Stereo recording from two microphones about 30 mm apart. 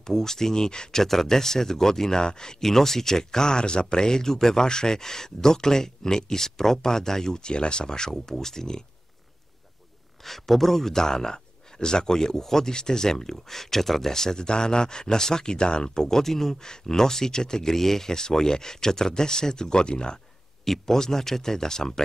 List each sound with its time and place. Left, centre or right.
0.0 s speech: centre
0.9 s speech: centre
2.6 s speech: centre
10.2 s speech: centre; by 20.2 s left
20.8 s speech: centre